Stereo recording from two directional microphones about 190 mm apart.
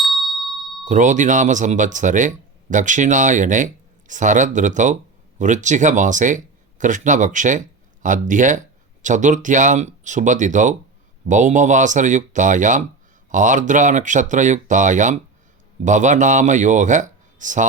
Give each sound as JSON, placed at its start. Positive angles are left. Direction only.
{"t": 0.0, "sound": "bell", "side_deg": 0}
{"t": 0.9, "sound": "speech", "side_deg": -40}